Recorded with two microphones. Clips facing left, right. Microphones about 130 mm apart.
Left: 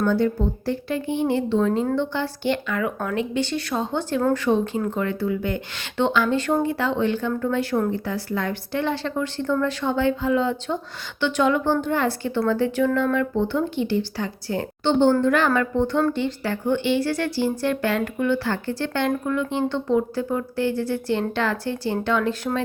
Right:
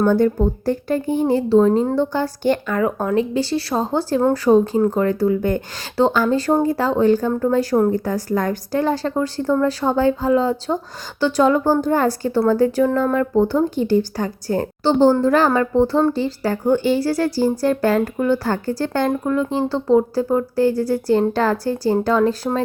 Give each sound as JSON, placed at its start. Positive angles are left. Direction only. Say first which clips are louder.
{"t": 0.0, "sound": "speech", "louder": "right 5 dB", "side_deg": -45}